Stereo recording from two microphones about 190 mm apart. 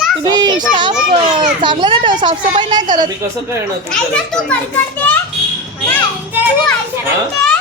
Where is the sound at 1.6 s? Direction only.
25° right (ahead or behind).